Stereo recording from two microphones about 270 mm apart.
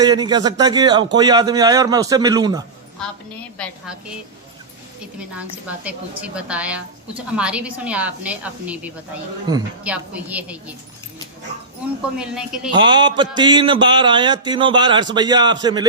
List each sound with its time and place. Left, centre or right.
0.0 s a man's voice: centre
5.4 s a woman's voice: centre
12.1 s a woman's voice: centre
12.7 s a man's voice: centre